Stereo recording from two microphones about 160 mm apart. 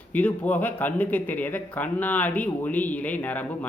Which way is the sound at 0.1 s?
10° left (ahead or behind).